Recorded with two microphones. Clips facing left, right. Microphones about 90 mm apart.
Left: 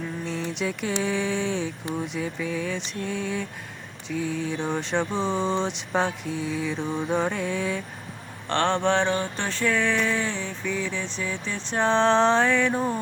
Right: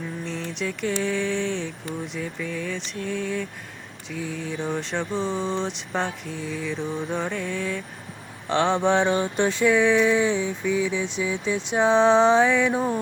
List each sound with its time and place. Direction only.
0.5 s vehicle: 5° left (ahead or behind)
8.4 s mantra: 10° right (ahead or behind)